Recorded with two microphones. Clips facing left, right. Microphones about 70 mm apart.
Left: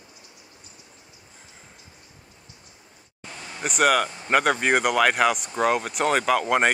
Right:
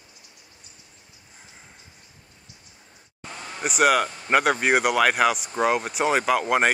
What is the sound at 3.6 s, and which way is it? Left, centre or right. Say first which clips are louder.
Speech: right 1 dB; centre.